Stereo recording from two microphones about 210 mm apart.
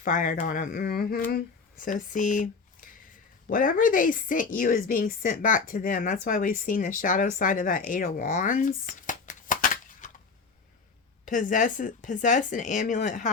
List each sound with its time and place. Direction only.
0.0 s a woman's voice: 40° left (ahead or behind)
11.3 s a woman's voice: 40° left (ahead or behind)